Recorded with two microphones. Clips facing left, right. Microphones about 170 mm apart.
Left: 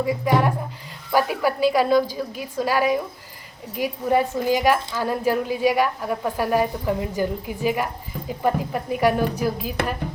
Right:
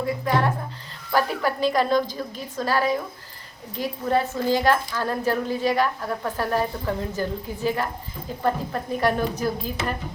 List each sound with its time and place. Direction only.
0.0 s a woman's voice: 10° left (ahead or behind)